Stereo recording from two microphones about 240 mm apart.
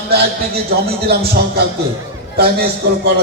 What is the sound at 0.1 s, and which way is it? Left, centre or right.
A man's voice, right.